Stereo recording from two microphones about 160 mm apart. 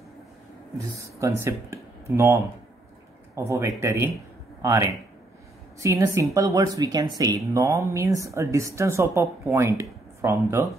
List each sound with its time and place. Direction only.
1.2 s a man's voice: 15° right (ahead or behind)